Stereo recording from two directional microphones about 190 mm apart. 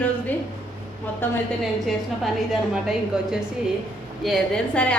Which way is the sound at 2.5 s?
Centre (ahead or behind).